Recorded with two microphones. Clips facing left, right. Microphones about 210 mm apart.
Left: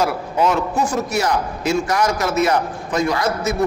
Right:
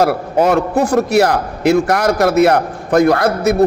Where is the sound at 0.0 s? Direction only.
60° right (ahead or behind).